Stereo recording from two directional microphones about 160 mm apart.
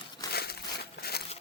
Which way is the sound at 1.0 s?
75° left (ahead or behind).